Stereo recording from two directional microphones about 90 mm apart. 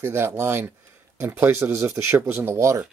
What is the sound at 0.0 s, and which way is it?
Speech, 25° right (ahead or behind).